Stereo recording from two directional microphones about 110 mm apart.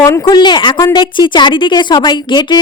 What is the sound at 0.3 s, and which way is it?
A woman's voice, 45° left (ahead or behind).